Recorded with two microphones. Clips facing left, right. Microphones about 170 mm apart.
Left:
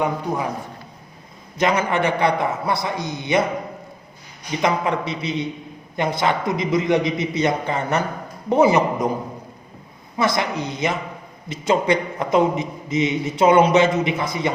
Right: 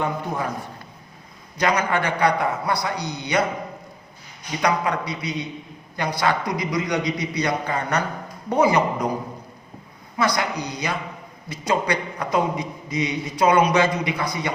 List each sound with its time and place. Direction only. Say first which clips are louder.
1.5 s a man's voice: left 2 dB; 25° left (ahead or behind)
4.6 s a man's voice: left 2 dB; 25° left (ahead or behind)
10.2 s a man's voice: left 2 dB; 20° left (ahead or behind)